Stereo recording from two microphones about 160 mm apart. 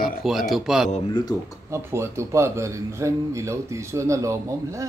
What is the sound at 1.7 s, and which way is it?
Speech, 15° right (ahead or behind).